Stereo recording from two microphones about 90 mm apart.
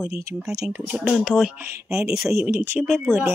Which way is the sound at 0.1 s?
35° right (ahead or behind).